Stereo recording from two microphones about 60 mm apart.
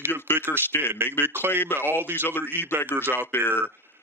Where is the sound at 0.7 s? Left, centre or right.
Left.